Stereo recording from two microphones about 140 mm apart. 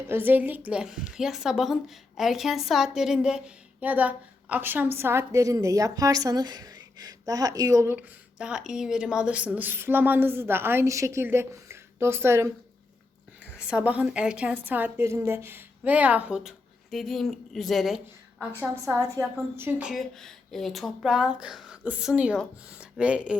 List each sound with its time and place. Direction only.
0.1 s a woman's voice: 15° right (ahead or behind)
7.9 s a woman's voice: 5° right (ahead or behind)
13.6 s a woman's voice: 5° right (ahead or behind)